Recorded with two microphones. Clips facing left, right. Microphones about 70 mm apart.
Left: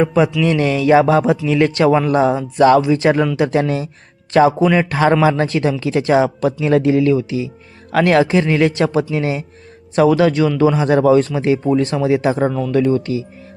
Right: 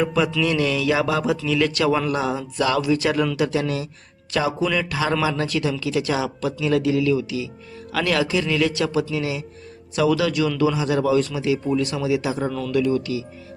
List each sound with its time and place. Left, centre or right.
0.0 s speech: left
12.5 s speech: centre
12.7 s speech: left